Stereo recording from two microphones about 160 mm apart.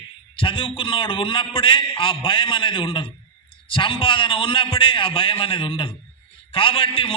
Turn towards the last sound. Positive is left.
turn(degrees=35)  # may be behind; listen again after turning